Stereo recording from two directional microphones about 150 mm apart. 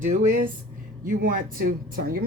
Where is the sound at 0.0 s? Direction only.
60° right (ahead or behind).